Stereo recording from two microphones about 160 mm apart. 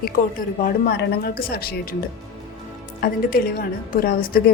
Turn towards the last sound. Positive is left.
turn(degrees=65)  # may be behind; listen again after turning